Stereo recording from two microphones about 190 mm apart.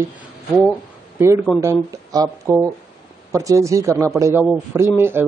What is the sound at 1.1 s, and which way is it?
A man's voice, 15° right (ahead or behind).